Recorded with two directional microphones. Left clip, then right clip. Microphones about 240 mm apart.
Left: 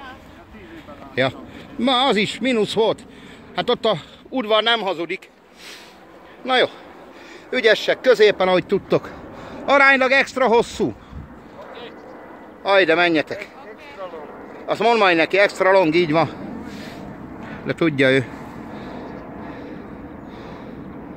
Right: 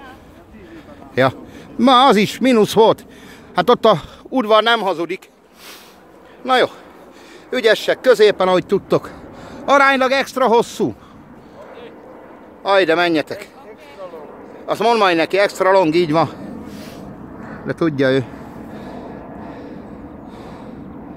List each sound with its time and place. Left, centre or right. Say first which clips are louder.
1.8 s speech: right 7 dB; right
6.4 s speech: right 3 dB; centre
12.6 s speech: right 1 dB; centre
14.7 s speech: right 2 dB; centre
18.8 s vehicle: right 2 dB; centre
20.2 s a sound: right 1 dB; centre